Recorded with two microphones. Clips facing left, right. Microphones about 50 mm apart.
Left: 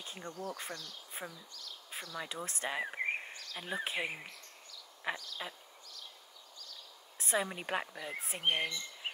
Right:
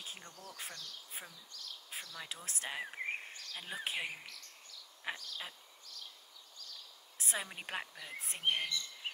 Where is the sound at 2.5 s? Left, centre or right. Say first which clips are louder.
Left 4 dB; centre.